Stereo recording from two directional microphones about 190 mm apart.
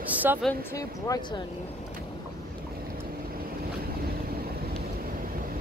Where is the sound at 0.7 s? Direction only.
20° left (ahead or behind).